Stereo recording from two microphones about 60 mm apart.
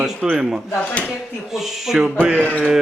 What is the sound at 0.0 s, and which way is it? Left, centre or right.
Speech, centre.